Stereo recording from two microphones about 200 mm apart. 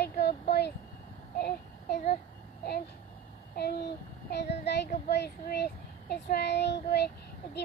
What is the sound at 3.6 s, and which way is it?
Speech, 55° left (ahead or behind).